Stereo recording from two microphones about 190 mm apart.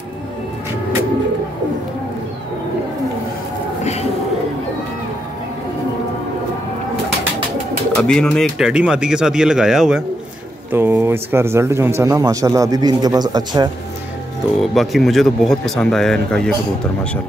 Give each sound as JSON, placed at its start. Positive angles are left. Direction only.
{"t": 8.0, "sound": "speech", "side_deg": 0}
{"t": 14.6, "sound": "speech", "side_deg": 0}